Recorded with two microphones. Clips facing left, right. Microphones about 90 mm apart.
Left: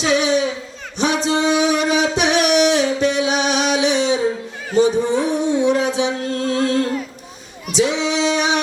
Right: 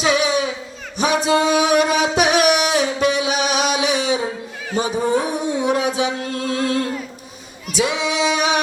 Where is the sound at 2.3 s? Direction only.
5° right (ahead or behind).